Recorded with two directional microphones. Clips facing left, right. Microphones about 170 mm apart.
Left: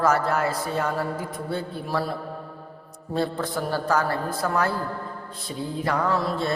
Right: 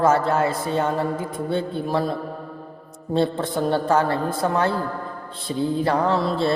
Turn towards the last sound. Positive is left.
turn(degrees=-25)  # may be behind; listen again after turning